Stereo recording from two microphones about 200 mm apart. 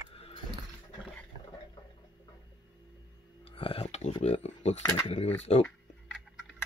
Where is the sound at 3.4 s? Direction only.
25° left (ahead or behind).